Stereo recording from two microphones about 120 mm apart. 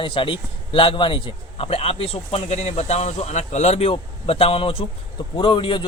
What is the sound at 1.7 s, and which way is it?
Speech, 55° left (ahead or behind).